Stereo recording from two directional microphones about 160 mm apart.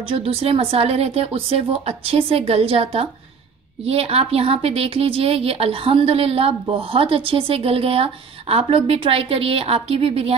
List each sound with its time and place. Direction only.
0.0 s a woman's voice: 35° right (ahead or behind)